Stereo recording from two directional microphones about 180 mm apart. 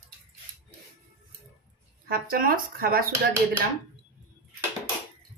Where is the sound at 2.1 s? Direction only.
55° right (ahead or behind).